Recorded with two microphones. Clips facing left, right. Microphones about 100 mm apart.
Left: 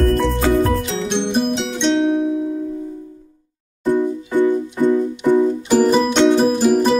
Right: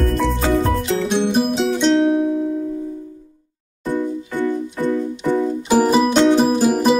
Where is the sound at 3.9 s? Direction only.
15° left (ahead or behind).